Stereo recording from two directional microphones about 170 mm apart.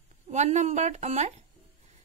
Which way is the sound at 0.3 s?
40° right (ahead or behind).